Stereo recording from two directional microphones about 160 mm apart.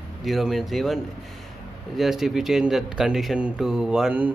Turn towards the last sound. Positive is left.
turn(degrees=-5)  # may be behind; listen again after turning